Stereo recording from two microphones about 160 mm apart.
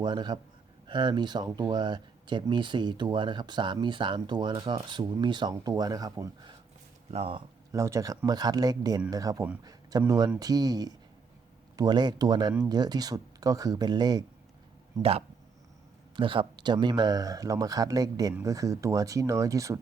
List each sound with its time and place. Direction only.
0.0 s speech: 25° right (ahead or behind)
7.1 s speech: 35° right (ahead or behind)
7.7 s speech: 20° right (ahead or behind)
16.1 s speech: 30° right (ahead or behind)